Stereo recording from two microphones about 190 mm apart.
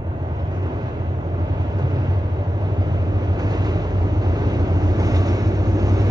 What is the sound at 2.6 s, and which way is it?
Vehicle, 20° right (ahead or behind).